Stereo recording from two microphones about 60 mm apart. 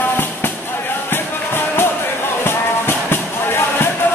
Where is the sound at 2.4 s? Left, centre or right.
Left.